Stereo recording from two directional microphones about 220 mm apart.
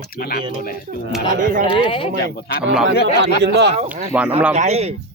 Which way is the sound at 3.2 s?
50° right (ahead or behind).